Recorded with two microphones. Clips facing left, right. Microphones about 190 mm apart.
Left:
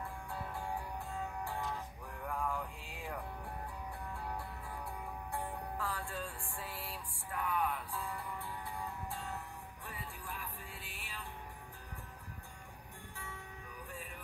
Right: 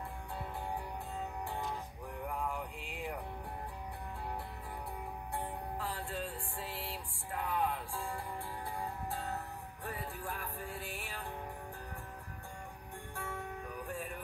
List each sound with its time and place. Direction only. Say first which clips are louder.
2.2 s music: left 1 dB; 20° right (ahead or behind)
5.3 s music: right 1 dB; 25° right (ahead or behind); by 11.2 s 45° right (ahead or behind)
13.1 s music: right 8 dB; 55° right (ahead or behind)